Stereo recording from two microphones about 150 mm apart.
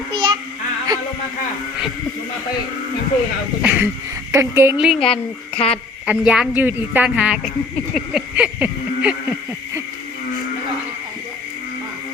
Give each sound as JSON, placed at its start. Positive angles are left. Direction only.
{"t": 0.1, "sound": "child singing", "side_deg": -30}
{"t": 3.6, "sound": "a woman's voice", "side_deg": -10}
{"t": 4.8, "sound": "speech", "side_deg": -5}
{"t": 5.0, "sound": "speech", "side_deg": 40}
{"t": 6.1, "sound": "a woman's voice", "side_deg": -5}
{"t": 7.9, "sound": "a sound", "side_deg": -5}